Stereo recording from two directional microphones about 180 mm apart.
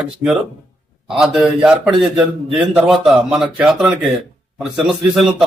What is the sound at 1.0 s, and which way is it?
A man's voice, centre (ahead or behind).